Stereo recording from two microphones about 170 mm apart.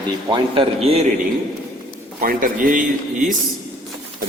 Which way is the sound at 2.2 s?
60° right (ahead or behind).